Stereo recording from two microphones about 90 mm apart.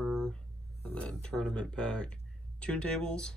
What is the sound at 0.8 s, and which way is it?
Speech, 10° left (ahead or behind).